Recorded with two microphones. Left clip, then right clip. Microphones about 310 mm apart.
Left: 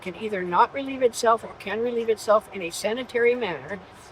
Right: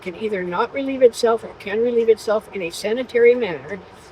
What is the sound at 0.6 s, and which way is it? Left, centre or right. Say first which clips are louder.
Speech: right 6 dB; centre.